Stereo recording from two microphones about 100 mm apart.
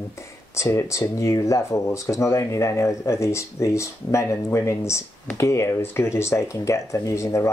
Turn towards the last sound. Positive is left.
turn(degrees=30)  # may be behind; listen again after turning